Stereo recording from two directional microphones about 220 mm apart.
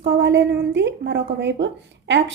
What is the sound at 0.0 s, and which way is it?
A woman's voice, 55° right (ahead or behind).